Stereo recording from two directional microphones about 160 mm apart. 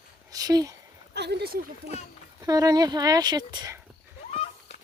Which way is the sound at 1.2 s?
90° right.